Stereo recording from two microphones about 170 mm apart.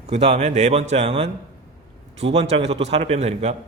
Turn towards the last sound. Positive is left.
turn(degrees=-40)  # may be behind; listen again after turning